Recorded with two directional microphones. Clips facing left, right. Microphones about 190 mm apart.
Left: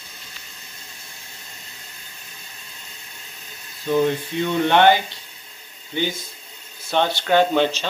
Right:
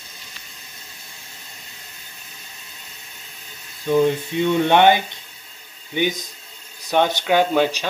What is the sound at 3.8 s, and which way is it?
Speech, 15° right (ahead or behind).